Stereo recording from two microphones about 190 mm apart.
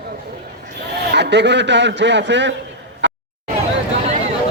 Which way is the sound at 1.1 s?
65° right (ahead or behind).